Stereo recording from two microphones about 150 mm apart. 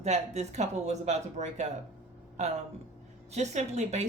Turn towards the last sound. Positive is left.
turn(degrees=-50)  # may be behind; listen again after turning